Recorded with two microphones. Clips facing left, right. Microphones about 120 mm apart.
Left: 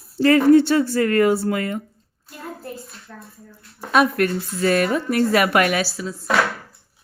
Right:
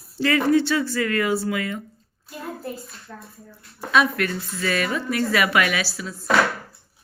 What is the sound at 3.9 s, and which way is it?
A woman's voice, 50° left (ahead or behind).